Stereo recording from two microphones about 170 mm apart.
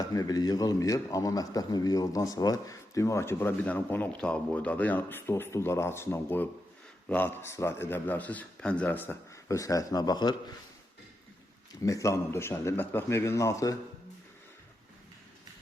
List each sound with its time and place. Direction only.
0.0 s a man's voice: 20° left (ahead or behind)
11.8 s a man's voice: 20° left (ahead or behind)